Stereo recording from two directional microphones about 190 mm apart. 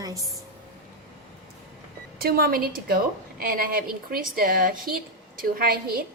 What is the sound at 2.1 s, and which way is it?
A woman's voice, 50° right (ahead or behind).